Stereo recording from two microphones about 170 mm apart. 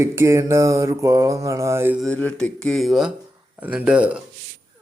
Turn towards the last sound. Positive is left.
turn(degrees=-5)  # may be behind; listen again after turning